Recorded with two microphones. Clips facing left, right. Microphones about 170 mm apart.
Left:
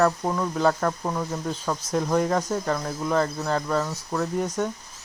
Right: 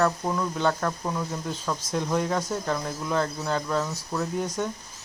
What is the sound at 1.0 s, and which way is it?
Speech, 15° left (ahead or behind).